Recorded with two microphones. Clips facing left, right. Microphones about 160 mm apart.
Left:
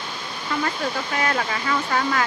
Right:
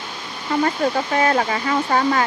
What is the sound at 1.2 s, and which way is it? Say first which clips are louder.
Speech: right 5 dB; 30° right (ahead or behind).